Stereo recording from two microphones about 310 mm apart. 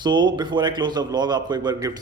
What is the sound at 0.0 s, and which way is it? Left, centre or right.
A man's voice, centre.